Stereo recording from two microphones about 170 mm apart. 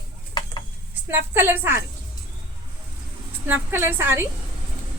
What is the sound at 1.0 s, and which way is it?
Speech, 15° right (ahead or behind).